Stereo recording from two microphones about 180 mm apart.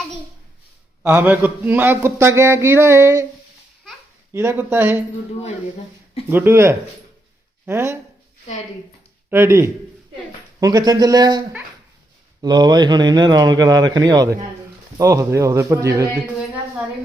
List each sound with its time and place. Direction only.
1.0 s a man's voice: 10° right (ahead or behind)
4.3 s a man's voice: 10° right (ahead or behind)
6.2 s a man's voice: 10° right (ahead or behind)
9.3 s a man's voice: 15° right (ahead or behind)